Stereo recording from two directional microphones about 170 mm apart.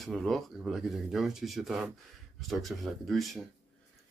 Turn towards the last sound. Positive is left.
turn(degrees=0)  # may be behind; listen again after turning